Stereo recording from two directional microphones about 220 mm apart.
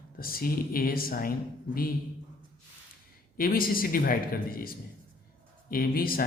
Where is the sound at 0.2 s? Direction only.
40° left (ahead or behind).